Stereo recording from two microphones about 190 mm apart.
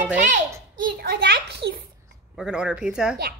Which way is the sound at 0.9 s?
60° right (ahead or behind).